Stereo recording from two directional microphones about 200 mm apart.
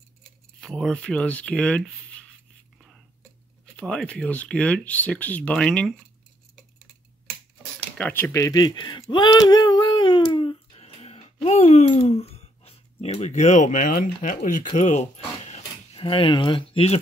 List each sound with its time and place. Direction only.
0.6 s speech: centre (ahead or behind)
3.8 s speech: 5° left (ahead or behind)
8.0 s speech: 10° left (ahead or behind); by 17.0 s 30° left (ahead or behind)